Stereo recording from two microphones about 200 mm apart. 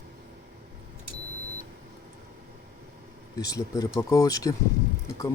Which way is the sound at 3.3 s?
20° left (ahead or behind).